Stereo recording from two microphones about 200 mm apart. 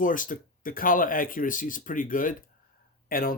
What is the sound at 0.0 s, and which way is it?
Speech, 40° left (ahead or behind).